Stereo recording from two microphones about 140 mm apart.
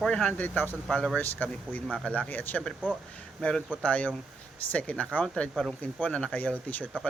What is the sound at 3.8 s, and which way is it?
Speech, 10° left (ahead or behind).